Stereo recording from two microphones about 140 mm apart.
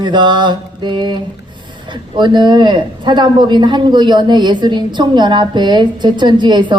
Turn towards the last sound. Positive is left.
turn(degrees=-35)  # may be behind; listen again after turning